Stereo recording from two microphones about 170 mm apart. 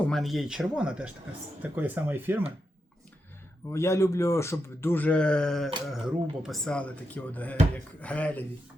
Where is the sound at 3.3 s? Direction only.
15° left (ahead or behind).